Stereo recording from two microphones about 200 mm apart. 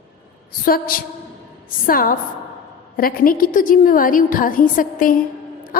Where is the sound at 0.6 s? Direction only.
45° left (ahead or behind).